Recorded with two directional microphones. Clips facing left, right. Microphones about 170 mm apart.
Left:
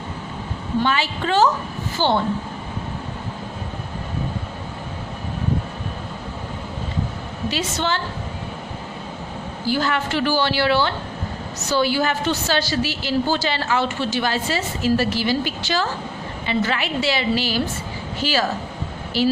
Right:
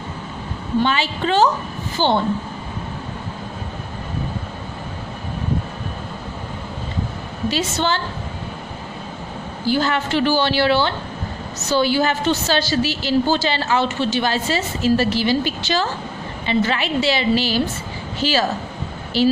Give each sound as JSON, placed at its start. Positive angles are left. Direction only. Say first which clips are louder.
{"t": 0.8, "sound": "a woman's voice", "louder": "right 1 dB", "side_deg": -20}
{"t": 7.5, "sound": "a woman's voice", "louder": "right 2 dB", "side_deg": -30}
{"t": 9.7, "sound": "a woman's voice", "louder": "right 2 dB", "side_deg": -25}